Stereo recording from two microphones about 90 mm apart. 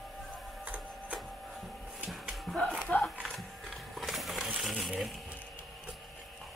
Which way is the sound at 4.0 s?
Centre (ahead or behind).